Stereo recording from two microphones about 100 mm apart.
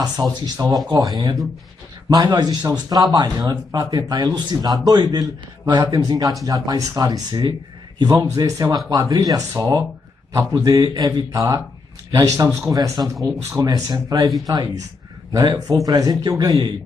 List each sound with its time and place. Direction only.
0.0 s a man's voice: 40° right (ahead or behind)